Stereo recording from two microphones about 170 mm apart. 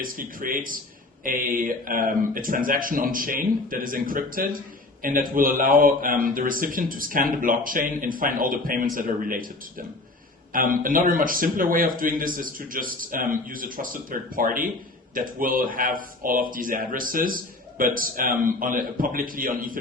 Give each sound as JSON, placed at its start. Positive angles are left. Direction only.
{"t": 0.0, "sound": "a man's voice", "side_deg": -55}